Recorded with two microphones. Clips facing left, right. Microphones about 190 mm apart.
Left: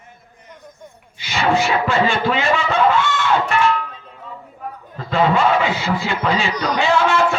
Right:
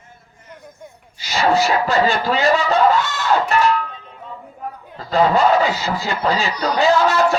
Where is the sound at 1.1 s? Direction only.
40° right (ahead or behind).